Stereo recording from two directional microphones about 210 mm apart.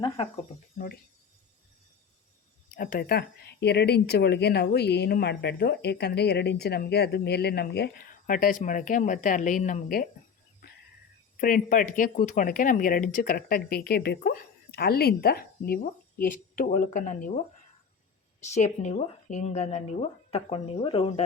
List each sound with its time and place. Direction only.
2.7 s speech: 40° left (ahead or behind)
10.6 s whispering: 45° left (ahead or behind)
11.3 s speech: 40° left (ahead or behind); by 21.2 s 25° left (ahead or behind)